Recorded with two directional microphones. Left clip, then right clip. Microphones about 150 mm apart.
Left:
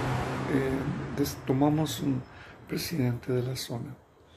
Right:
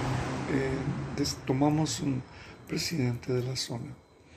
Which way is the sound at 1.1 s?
20° left (ahead or behind).